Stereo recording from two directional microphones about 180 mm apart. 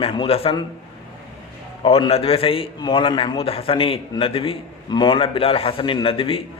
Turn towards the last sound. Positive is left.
turn(degrees=30)  # may be behind; listen again after turning